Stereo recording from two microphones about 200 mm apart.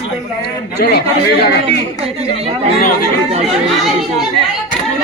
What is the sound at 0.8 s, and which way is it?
Speech, 55° left (ahead or behind).